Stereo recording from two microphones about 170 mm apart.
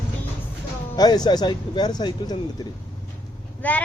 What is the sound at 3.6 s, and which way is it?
Speech, 10° left (ahead or behind).